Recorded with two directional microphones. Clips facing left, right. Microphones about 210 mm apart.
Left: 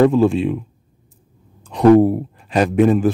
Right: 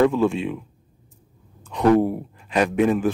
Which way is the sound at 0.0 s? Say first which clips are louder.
Left 5 dB; 35° left (ahead or behind).